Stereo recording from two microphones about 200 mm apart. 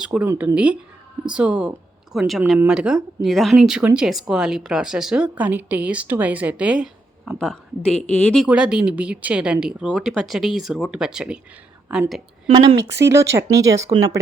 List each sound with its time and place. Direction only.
0.0 s speech: 5° right (ahead or behind)
12.7 s speech: 60° right (ahead or behind)
13.1 s speech: 15° right (ahead or behind)